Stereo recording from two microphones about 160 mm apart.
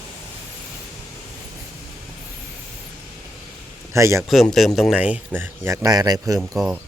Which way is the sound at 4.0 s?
20° right (ahead or behind).